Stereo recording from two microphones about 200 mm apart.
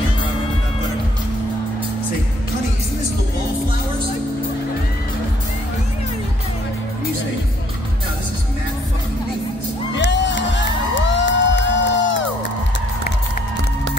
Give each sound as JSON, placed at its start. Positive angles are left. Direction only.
{"t": 9.9, "sound": "music", "side_deg": 60}